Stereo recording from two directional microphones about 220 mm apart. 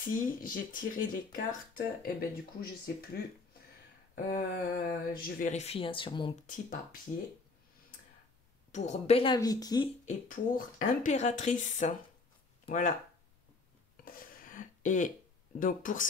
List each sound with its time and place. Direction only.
0.0 s speech: 40° left (ahead or behind); by 6.4 s 20° left (ahead or behind)
6.4 s speech: 40° left (ahead or behind)
8.7 s speech: 30° left (ahead or behind)
10.0 s speech: 35° left (ahead or behind)
14.0 s a sound: 40° left (ahead or behind)
15.6 s speech: 35° left (ahead or behind)